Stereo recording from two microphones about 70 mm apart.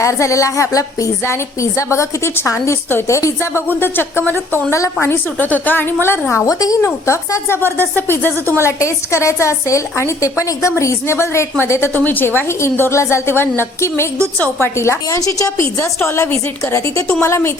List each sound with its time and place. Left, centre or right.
0.0 s a woman's voice: left
1.2 s a woman's voice: left
3.7 s a woman's voice: left
4.7 s a woman's voice: left
6.3 s speech: left
7.8 s speech: left
8.6 s a woman's voice: left
15.2 s a woman's voice: left